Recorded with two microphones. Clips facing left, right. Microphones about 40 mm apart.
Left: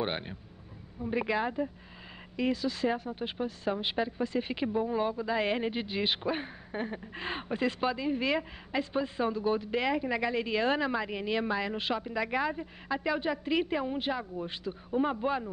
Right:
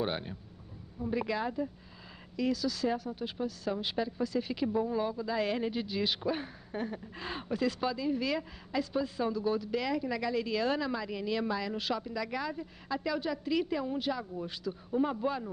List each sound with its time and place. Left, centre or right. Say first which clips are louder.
0.0 s speech: left 1 dB; left